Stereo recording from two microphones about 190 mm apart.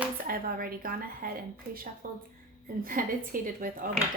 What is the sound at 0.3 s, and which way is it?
A woman's voice, 50° right (ahead or behind).